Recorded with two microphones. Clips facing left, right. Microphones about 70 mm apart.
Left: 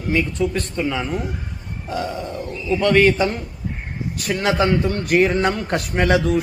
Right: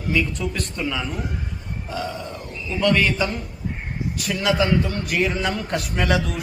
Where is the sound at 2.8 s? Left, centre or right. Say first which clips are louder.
Left 4 dB; left.